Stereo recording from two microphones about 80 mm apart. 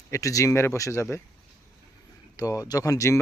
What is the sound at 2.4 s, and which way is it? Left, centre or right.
Speech, left.